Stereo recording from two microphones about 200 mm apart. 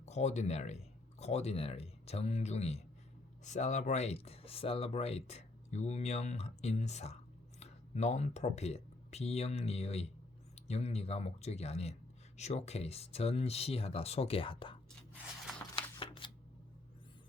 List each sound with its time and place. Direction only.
0.0 s speech: 35° left (ahead or behind)
15.7 s shuffling cards: 25° left (ahead or behind)